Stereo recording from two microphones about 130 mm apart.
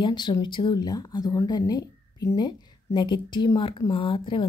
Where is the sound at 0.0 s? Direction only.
35° left (ahead or behind).